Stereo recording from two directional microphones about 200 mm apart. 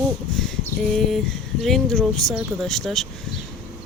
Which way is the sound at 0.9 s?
Centre (ahead or behind).